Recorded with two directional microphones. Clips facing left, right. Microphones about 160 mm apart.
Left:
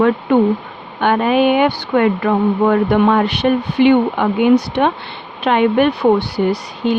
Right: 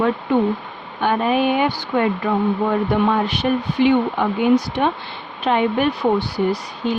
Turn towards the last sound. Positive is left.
turn(degrees=70)  # may be behind; listen again after turning